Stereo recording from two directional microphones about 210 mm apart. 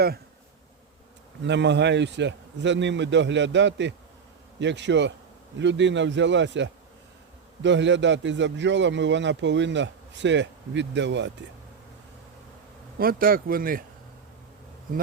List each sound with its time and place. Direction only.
1.5 s a man's voice: 55° right (ahead or behind)
13.0 s speech: 45° right (ahead or behind)